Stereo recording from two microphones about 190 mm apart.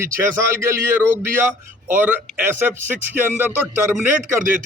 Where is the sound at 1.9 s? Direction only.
10° right (ahead or behind).